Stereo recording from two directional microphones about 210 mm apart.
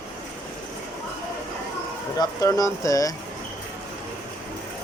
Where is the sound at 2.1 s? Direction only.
15° left (ahead or behind).